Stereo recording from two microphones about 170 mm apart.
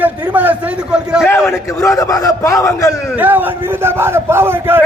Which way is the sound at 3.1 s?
10° right (ahead or behind).